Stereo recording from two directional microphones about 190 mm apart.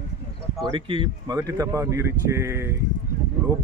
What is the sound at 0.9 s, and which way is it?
Speech, 25° right (ahead or behind).